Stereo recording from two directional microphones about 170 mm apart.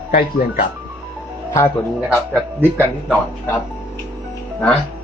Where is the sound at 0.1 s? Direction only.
55° left (ahead or behind).